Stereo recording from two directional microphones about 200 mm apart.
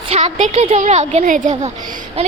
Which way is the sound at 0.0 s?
30° right (ahead or behind).